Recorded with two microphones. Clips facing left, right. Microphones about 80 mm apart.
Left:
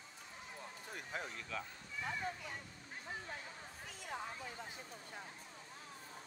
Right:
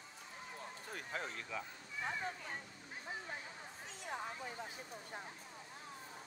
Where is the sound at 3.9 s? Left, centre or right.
Right.